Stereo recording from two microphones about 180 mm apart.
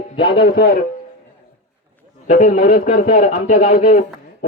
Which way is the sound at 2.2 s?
40° left (ahead or behind).